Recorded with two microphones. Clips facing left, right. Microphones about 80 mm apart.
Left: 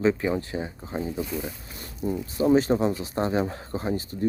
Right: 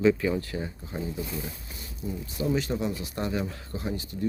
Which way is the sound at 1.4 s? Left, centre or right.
Left.